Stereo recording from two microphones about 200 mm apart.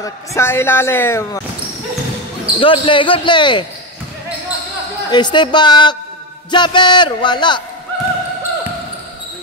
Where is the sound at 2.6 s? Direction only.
25° left (ahead or behind).